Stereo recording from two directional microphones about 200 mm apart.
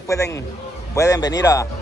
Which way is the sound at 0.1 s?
15° left (ahead or behind).